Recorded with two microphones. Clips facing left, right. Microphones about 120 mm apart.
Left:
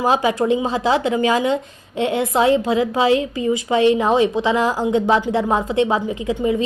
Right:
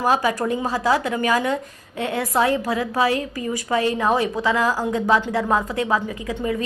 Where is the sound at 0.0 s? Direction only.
20° left (ahead or behind).